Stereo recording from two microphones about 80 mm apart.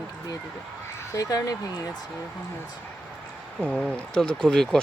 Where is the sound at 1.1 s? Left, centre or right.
Left.